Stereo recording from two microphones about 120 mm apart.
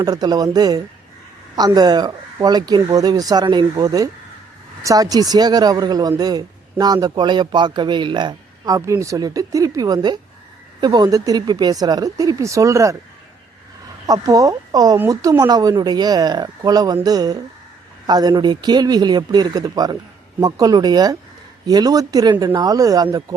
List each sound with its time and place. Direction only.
0.0 s speech: 35° right (ahead or behind)
14.1 s speech: 30° right (ahead or behind)